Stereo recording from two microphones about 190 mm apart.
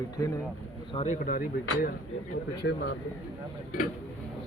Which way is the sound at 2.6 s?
60° left (ahead or behind).